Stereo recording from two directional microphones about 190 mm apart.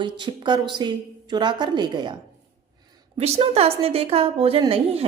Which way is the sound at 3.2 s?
30° right (ahead or behind).